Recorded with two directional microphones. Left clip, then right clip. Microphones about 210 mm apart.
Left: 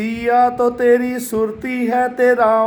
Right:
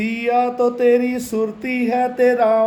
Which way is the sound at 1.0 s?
30° right (ahead or behind).